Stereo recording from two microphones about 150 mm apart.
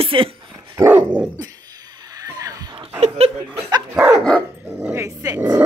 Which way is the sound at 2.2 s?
25° right (ahead or behind).